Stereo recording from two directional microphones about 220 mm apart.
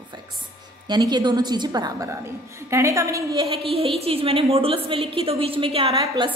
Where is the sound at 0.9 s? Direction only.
20° right (ahead or behind).